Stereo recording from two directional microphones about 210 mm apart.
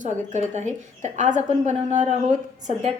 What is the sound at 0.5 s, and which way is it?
A woman's voice, 35° right (ahead or behind).